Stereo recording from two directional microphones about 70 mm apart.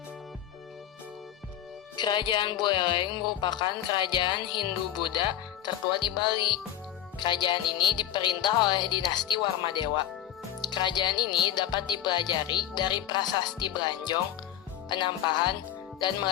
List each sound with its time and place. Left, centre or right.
2.0 s speech: left